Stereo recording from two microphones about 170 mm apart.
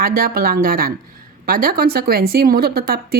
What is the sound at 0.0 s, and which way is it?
A woman's voice, 60° right (ahead or behind).